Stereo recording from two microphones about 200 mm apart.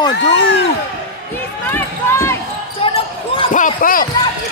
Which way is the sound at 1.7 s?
15° left (ahead or behind).